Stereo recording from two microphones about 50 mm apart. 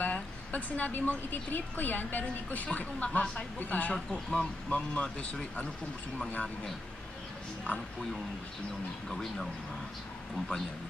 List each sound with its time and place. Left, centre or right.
0.0 s a woman's voice: left
4.1 s speech: centre
4.6 s speech: centre
9.1 s speech: centre